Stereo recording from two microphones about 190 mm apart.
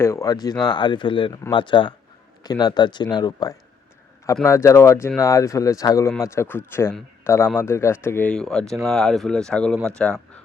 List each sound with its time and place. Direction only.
0.0 s speech: 15° left (ahead or behind)